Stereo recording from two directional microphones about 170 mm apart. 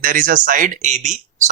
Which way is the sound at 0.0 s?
55° right (ahead or behind).